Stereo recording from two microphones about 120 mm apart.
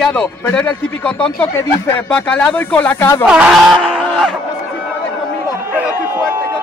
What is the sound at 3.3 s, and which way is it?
Speech, 5° right (ahead or behind).